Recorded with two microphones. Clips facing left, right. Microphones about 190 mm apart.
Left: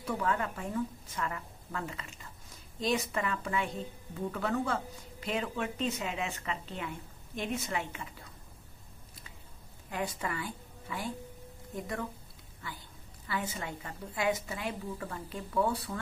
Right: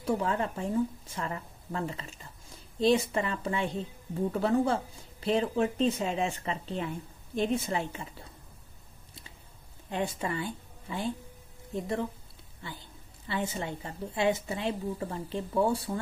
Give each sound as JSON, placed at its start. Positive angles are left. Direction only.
{"t": 0.0, "sound": "a woman's voice", "side_deg": -30}
{"t": 9.8, "sound": "a woman's voice", "side_deg": -25}